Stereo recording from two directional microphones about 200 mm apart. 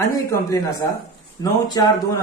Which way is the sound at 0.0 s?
15° left (ahead or behind).